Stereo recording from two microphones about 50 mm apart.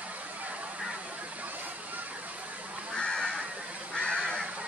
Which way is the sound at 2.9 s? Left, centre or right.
Centre.